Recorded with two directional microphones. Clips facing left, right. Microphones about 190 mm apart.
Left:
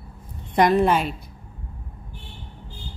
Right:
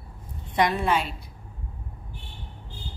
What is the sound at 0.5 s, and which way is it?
Speech, 50° left (ahead or behind).